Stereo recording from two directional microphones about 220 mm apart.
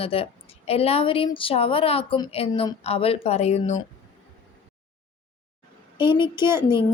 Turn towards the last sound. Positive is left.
turn(degrees=20)  # may be behind; listen again after turning